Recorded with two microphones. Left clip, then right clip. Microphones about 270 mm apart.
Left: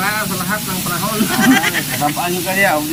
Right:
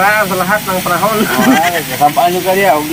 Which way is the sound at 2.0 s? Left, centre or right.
Left.